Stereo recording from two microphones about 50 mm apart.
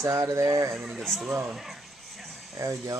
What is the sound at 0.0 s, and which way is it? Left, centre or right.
Speech, right.